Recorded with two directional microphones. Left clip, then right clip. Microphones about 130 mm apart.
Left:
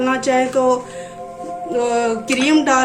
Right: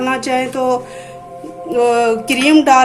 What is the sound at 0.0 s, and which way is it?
A woman's voice, 35° right (ahead or behind).